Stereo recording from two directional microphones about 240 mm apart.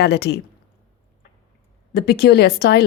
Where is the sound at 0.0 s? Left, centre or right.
Left.